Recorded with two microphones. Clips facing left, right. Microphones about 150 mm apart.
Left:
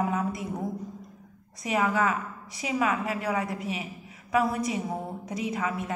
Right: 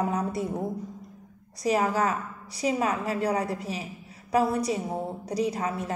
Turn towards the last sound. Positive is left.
turn(degrees=-35)  # may be behind; listen again after turning